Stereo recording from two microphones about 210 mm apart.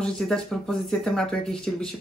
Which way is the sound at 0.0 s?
Centre (ahead or behind).